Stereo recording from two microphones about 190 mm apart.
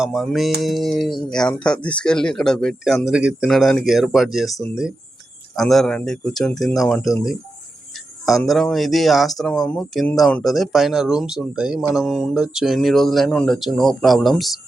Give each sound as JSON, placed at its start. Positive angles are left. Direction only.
{"t": 0.0, "sound": "speech", "side_deg": 0}